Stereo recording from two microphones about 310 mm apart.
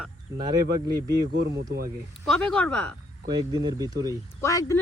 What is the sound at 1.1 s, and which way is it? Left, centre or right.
Speech, right.